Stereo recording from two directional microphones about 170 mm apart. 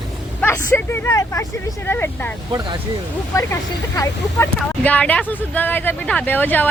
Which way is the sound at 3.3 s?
15° left (ahead or behind).